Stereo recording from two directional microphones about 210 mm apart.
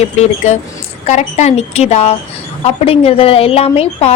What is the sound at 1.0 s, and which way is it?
A woman's voice, 35° left (ahead or behind).